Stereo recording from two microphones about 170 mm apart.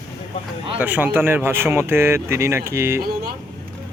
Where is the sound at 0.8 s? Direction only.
10° right (ahead or behind).